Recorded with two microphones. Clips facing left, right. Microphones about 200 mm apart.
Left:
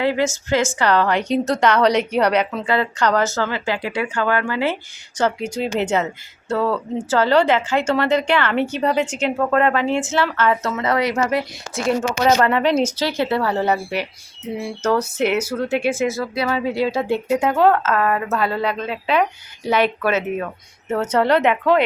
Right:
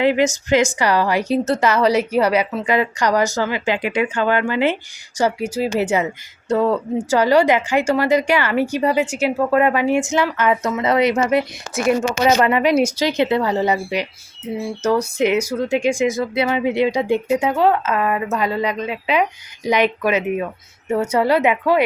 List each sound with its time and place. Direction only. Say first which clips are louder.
0.0 s speech: right 3 dB; 20° right (ahead or behind)
5.1 s speech: right 2 dB; 10° right (ahead or behind)